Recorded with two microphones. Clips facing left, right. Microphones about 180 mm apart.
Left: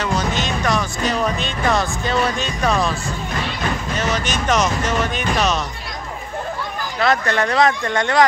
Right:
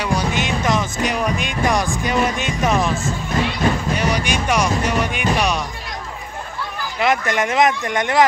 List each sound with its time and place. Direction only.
0.0 s music: 10° right (ahead or behind)
2.0 s speech: 15° right (ahead or behind)
7.0 s speech: 15° right (ahead or behind)